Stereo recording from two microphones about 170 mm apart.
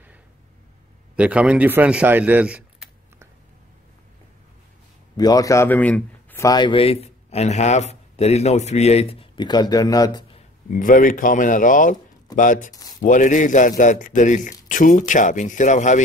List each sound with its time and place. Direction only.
1.1 s speech: 5° right (ahead or behind)
5.1 s speech: 20° left (ahead or behind)
6.4 s a man's voice: 25° left (ahead or behind)
10.7 s a man's voice: 55° left (ahead or behind)